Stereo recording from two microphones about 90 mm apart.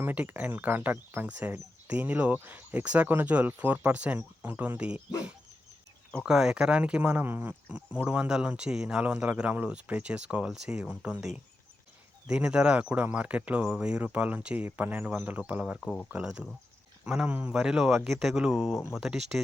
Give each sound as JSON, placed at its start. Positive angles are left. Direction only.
{"t": 0.0, "sound": "speech", "side_deg": -20}
{"t": 6.2, "sound": "speech", "side_deg": -5}
{"t": 17.5, "sound": "speech", "side_deg": -5}